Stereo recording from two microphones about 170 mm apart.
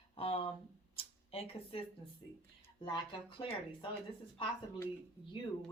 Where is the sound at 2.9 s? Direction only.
30° left (ahead or behind).